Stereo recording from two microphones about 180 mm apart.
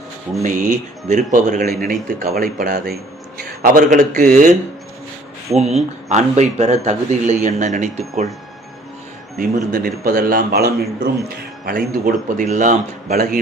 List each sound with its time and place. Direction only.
0.4 s a man's voice: 45° right (ahead or behind)
5.5 s a man's voice: 35° right (ahead or behind)
9.4 s a man's voice: 50° right (ahead or behind)